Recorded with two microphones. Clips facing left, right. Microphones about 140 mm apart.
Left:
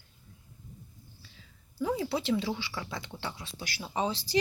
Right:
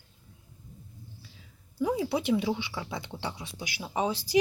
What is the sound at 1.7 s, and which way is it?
Speech, 10° right (ahead or behind).